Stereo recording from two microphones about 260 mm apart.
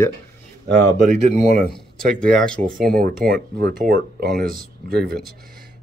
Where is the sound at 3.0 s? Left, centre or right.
Right.